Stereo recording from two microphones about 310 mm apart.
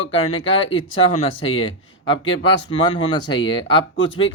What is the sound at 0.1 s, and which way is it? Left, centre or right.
Speech, centre.